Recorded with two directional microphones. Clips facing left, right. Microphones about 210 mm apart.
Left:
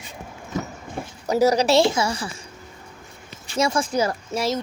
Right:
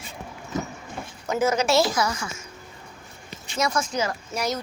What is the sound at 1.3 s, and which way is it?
A woman's voice, 35° left (ahead or behind).